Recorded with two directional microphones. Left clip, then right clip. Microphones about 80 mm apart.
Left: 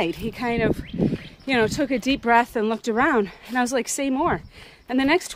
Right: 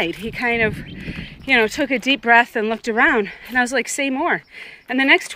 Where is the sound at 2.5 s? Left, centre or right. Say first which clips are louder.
Right 2 dB; left.